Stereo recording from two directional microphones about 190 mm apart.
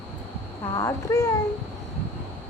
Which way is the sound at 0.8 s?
20° left (ahead or behind).